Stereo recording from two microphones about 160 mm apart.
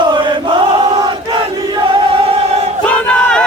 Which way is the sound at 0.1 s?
30° right (ahead or behind).